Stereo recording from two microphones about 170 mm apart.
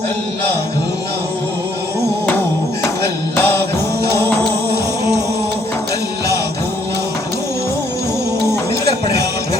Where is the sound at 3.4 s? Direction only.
15° left (ahead or behind).